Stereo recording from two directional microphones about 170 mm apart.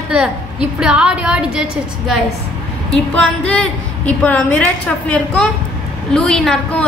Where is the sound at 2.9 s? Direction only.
10° left (ahead or behind).